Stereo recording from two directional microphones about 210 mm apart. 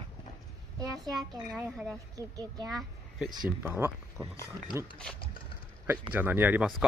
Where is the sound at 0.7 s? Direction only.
20° right (ahead or behind).